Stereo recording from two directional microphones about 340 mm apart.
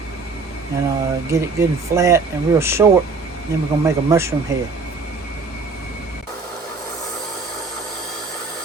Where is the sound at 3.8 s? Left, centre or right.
Centre.